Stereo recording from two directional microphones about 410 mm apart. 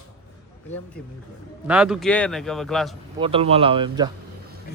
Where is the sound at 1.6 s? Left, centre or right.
Centre.